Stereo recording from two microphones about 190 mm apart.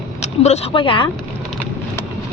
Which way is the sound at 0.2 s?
35° left (ahead or behind).